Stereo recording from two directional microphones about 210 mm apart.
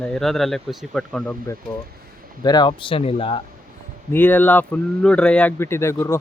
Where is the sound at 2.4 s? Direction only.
20° left (ahead or behind).